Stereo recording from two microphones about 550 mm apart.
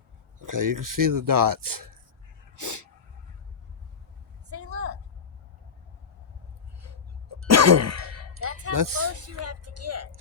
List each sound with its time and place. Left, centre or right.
0.3 s speech: right
2.6 s a sound: right
4.4 s vehicle: right
6.7 s throat clearing: right
9.1 s speech: right